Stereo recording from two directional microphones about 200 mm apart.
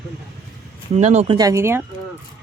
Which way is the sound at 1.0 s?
35° right (ahead or behind).